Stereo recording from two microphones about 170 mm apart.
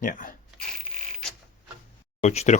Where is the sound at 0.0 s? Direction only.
55° left (ahead or behind).